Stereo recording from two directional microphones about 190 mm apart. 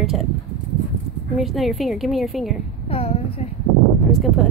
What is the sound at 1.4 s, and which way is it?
Speech, centre (ahead or behind).